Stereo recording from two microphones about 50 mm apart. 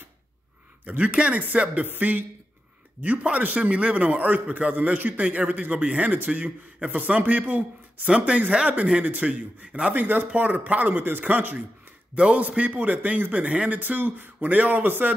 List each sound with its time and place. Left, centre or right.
0.8 s a man's voice: right
12.2 s a man's voice: right
13.7 s a man's voice: right